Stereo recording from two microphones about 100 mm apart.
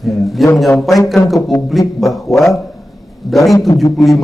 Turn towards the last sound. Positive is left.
turn(degrees=0)  # may be behind; listen again after turning